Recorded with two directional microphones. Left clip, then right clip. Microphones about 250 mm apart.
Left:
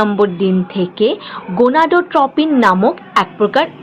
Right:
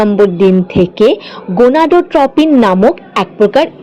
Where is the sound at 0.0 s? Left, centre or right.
Right.